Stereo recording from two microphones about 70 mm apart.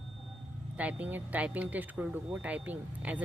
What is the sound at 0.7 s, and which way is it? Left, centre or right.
Speech, right.